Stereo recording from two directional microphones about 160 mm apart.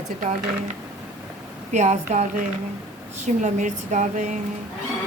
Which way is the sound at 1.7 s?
45° right (ahead or behind).